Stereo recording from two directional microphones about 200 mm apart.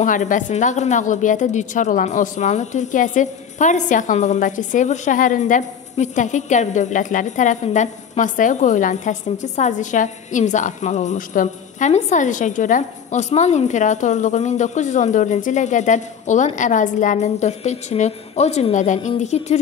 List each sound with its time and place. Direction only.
0.0 s a woman's voice: 40° left (ahead or behind)